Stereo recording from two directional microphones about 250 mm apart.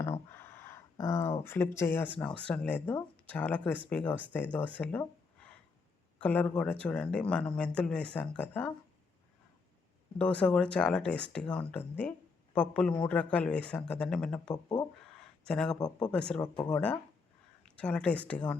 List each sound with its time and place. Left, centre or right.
0.0 s speech: centre
10.2 s speech: centre
14.5 s speech: centre
15.2 s a sound: centre
15.8 s speech: centre
16.1 s speech: centre
17.7 s speech: centre